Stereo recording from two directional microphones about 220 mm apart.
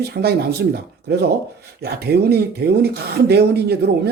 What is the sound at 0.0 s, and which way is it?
Speech, 45° right (ahead or behind).